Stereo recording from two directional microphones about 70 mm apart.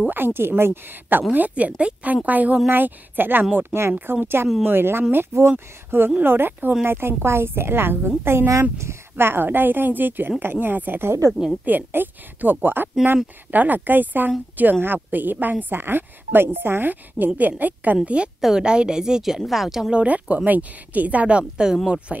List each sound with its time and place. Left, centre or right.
0.0 s speech: right
1.3 s a woman's voice: right; by 20.0 s centre
20.0 s a woman's voice: centre